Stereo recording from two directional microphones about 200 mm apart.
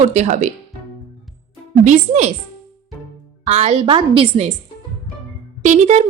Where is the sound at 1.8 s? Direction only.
35° right (ahead or behind).